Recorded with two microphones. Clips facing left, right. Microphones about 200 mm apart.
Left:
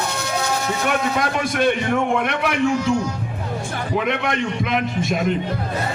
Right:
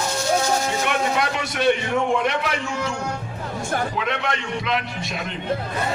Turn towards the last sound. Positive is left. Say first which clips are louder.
# left 6 dB
turn(degrees=50)  # may be behind; listen again after turning